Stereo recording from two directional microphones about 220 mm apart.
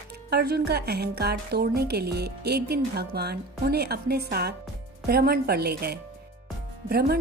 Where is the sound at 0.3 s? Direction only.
45° right (ahead or behind).